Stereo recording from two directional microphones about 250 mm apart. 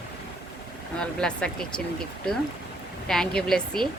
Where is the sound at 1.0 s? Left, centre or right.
Centre.